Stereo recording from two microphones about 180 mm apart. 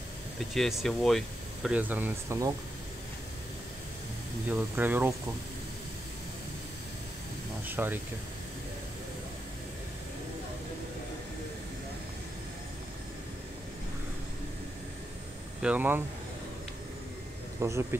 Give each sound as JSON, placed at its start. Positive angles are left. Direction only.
{"t": 0.6, "sound": "speech", "side_deg": 0}
{"t": 4.5, "sound": "speech", "side_deg": -10}
{"t": 7.6, "sound": "speech", "side_deg": -10}
{"t": 15.6, "sound": "speech", "side_deg": -10}
{"t": 17.6, "sound": "speech", "side_deg": -15}